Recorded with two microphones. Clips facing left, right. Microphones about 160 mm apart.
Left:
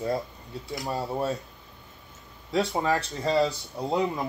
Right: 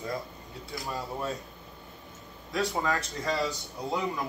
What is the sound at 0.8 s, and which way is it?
Speech, 35° left (ahead or behind).